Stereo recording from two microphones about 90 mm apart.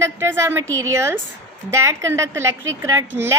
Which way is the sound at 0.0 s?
30° right (ahead or behind).